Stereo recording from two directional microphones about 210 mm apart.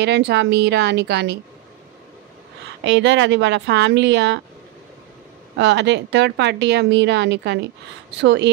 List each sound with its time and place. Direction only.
0.0 s a woman's voice: 55° right (ahead or behind)
2.8 s speech: 60° right (ahead or behind)
5.6 s speech: 55° right (ahead or behind)